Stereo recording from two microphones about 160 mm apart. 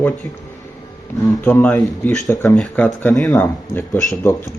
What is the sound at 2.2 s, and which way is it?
Speech, 20° left (ahead or behind).